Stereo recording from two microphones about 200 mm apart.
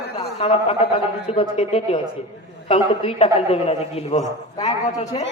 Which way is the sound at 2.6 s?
30° left (ahead or behind).